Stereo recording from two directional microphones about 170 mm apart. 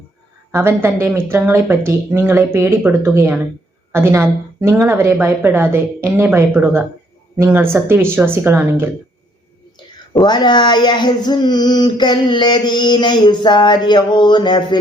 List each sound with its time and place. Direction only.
0.5 s speech: 15° right (ahead or behind)
10.2 s child singing: 25° left (ahead or behind)